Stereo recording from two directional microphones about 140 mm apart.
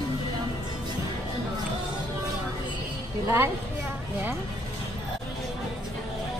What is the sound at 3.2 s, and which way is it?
Speech, 20° right (ahead or behind).